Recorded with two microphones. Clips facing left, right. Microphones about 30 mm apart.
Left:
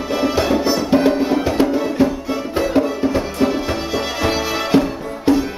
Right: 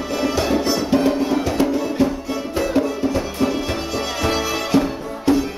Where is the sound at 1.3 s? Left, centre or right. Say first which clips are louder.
Left 2 dB; left.